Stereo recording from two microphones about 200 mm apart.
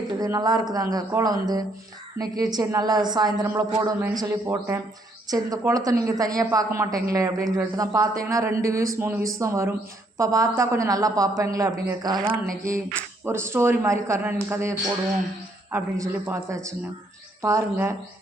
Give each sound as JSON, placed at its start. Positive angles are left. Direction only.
{"t": 0.1, "sound": "a woman's voice", "side_deg": -20}